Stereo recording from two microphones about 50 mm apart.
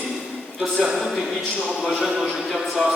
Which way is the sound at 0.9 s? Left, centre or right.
Centre.